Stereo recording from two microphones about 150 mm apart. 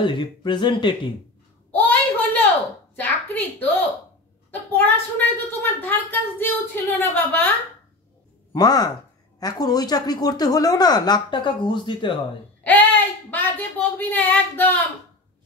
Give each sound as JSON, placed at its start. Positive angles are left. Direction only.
{"t": 0.0, "sound": "speech", "side_deg": 35}
{"t": 1.7, "sound": "a sound", "side_deg": 10}
{"t": 4.5, "sound": "a woman's voice", "side_deg": 10}
{"t": 8.5, "sound": "speech", "side_deg": 25}
{"t": 12.6, "sound": "speech", "side_deg": 10}